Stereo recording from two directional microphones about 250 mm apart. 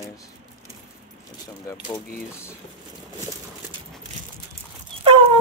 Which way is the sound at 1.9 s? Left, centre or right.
Centre.